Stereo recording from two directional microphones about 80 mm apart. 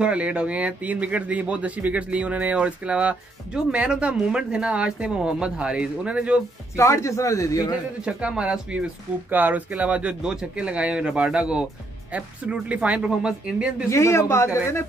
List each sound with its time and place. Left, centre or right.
0.0 s speech: centre
6.8 s a man's voice: left
8.0 s speech: centre
13.8 s a man's voice: left